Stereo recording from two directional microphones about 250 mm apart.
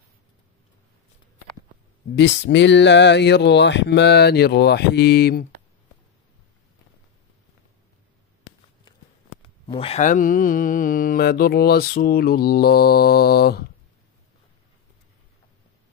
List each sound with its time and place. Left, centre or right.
2.1 s speech: left
9.7 s mantra: left